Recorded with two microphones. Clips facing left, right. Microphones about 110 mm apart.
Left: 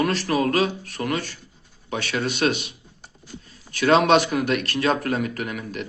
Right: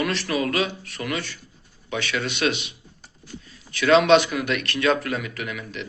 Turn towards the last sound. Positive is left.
turn(degrees=45)  # may be behind; listen again after turning